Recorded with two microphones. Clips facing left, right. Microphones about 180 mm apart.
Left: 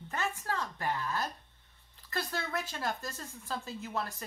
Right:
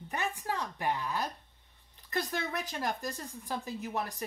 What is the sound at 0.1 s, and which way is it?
A woman's voice, 15° right (ahead or behind).